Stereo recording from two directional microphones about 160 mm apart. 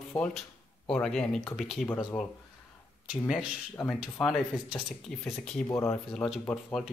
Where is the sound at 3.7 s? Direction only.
10° left (ahead or behind).